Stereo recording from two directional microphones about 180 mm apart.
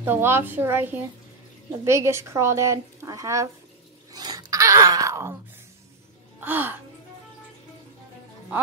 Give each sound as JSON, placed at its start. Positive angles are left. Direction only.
{"t": 0.0, "sound": "a woman's voice", "side_deg": -10}
{"t": 4.1, "sound": "groan", "side_deg": -20}
{"t": 6.4, "sound": "a woman's voice", "side_deg": -10}